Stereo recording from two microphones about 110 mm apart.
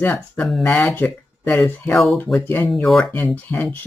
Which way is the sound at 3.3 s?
15° left (ahead or behind).